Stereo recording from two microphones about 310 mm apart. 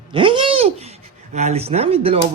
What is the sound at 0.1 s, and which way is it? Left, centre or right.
A man's voice, centre.